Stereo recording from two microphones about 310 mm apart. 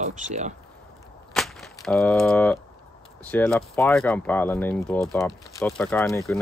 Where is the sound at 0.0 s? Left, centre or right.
Right.